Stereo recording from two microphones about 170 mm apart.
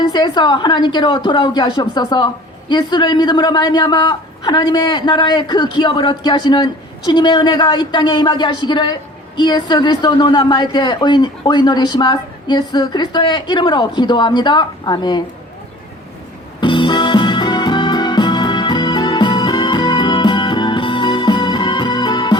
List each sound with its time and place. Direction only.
0.1 s a woman's voice: 25° left (ahead or behind)
16.6 s music: 30° left (ahead or behind)